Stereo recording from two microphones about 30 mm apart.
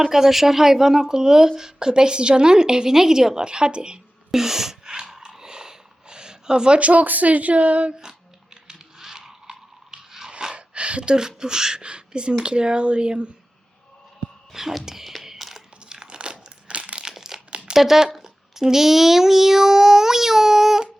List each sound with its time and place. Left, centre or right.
0.0 s speech: centre
3.4 s speech: right
4.3 s a sound: centre
4.9 s a sound: right
6.7 s speech: right
9.0 s crunch: centre
10.5 s a sound: right
11.1 s speech: right
11.8 s speech: right
14.5 s whispering: centre
15.9 s crumpling: right
17.0 s crumpling: centre
17.7 s speech: centre